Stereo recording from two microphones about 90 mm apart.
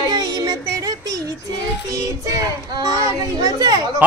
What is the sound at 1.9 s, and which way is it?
A child's voice, 45° right (ahead or behind).